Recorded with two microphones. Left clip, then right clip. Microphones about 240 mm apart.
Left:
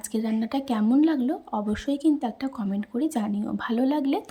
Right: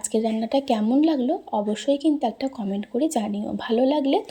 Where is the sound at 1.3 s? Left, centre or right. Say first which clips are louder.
Right 5 dB; left.